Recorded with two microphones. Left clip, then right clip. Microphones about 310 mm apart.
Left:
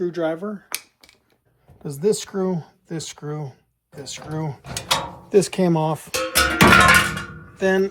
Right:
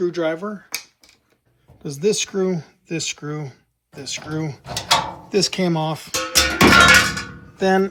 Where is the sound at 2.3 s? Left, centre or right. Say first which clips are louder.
Right 3 dB; centre.